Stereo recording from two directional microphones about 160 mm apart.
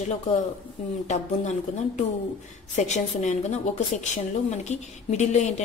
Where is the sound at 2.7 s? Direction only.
45° left (ahead or behind).